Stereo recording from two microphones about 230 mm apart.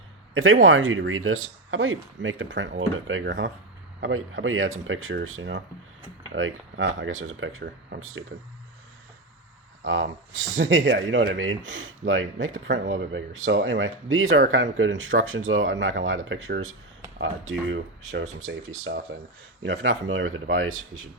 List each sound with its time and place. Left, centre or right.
0.3 s speech: right
9.8 s speech: right
18.2 s speech: right
19.6 s speech: right